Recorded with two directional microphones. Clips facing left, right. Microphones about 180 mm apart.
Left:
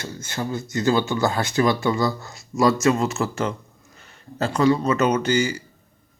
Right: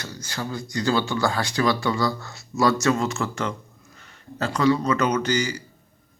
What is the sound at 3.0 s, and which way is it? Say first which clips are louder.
Speech: left 2 dB; 35° left (ahead or behind).